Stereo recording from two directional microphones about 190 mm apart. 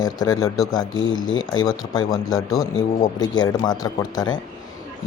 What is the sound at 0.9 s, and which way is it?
Speech, 90° left.